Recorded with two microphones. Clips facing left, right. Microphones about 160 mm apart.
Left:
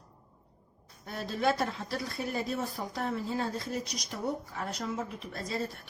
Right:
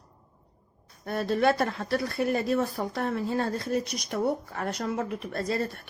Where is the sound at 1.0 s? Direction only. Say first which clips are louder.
Right 6 dB; 60° right (ahead or behind).